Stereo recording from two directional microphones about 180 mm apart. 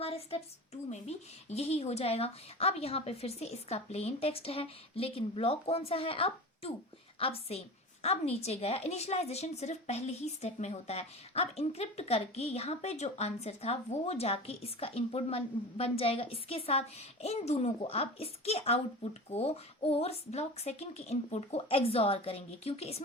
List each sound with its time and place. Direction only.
0.0 s a woman's voice: 35° left (ahead or behind)